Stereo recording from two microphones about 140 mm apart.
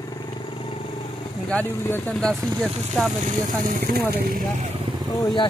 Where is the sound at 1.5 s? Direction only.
10° left (ahead or behind).